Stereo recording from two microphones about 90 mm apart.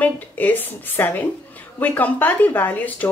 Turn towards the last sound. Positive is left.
turn(degrees=20)  # may be behind; listen again after turning